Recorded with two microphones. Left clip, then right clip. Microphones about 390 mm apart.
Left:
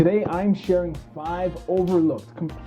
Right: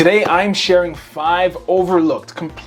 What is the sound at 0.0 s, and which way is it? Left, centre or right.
Speech, centre.